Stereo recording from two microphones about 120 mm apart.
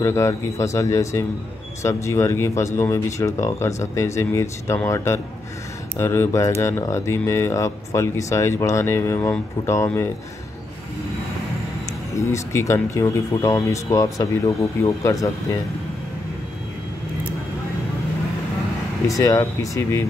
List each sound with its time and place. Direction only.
0.0 s speech: 25° left (ahead or behind)
12.2 s speech: 25° left (ahead or behind)
19.0 s speech: 30° left (ahead or behind)